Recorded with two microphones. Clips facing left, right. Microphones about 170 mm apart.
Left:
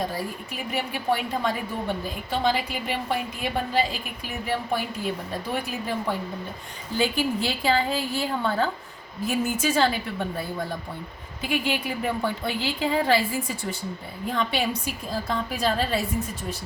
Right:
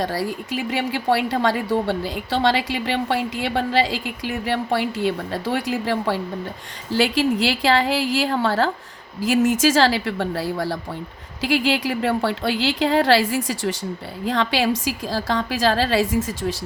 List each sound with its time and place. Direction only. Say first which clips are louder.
0.0 s a woman's voice: right 5 dB; 90° right